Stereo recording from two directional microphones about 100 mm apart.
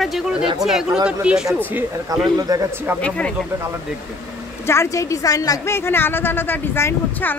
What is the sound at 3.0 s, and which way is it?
Speech, 10° left (ahead or behind).